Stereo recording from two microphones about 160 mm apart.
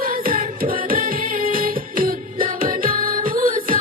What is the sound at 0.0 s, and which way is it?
Music, 65° right (ahead or behind).